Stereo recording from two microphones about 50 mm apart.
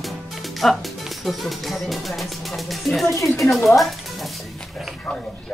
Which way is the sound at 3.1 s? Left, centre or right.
Left.